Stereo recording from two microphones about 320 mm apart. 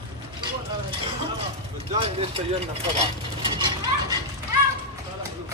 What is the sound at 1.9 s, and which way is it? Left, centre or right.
Vehicle, centre.